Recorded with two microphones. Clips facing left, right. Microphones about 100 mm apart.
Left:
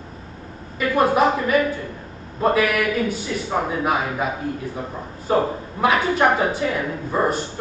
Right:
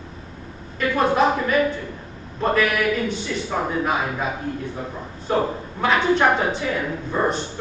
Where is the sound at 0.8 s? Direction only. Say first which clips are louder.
Left 1 dB; 5° left (ahead or behind).